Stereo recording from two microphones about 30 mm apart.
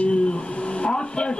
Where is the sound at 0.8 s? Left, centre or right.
Left.